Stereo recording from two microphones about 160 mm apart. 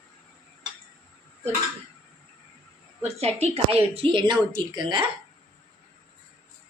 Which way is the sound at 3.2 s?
40° right (ahead or behind).